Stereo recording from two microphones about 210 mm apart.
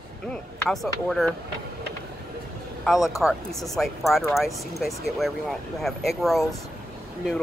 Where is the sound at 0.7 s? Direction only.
Centre (ahead or behind).